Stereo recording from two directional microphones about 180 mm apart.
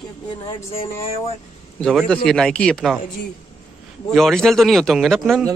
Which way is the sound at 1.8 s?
5° left (ahead or behind).